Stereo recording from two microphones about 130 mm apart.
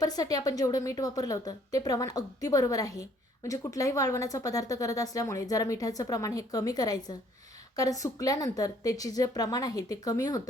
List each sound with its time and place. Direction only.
0.0 s a woman's voice: 30° left (ahead or behind)